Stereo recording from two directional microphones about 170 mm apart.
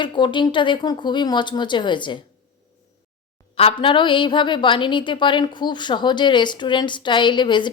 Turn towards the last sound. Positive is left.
turn(degrees=25)  # may be behind; listen again after turning